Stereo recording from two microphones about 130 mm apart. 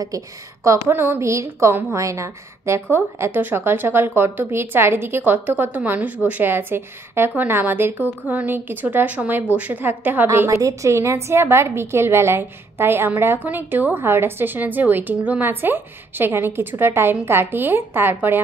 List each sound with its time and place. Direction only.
0.7 s a woman's voice: 20° right (ahead or behind)